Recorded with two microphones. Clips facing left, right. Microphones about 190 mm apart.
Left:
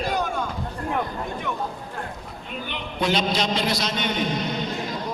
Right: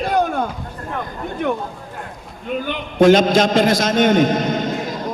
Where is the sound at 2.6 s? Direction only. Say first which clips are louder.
Right 13 dB; 50° right (ahead or behind).